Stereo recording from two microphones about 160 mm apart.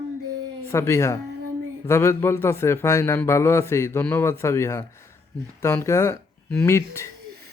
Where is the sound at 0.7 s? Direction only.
15° left (ahead or behind).